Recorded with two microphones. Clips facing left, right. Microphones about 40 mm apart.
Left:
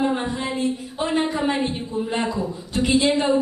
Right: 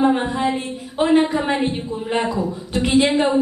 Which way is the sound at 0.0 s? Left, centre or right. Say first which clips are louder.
Right 5 dB; right.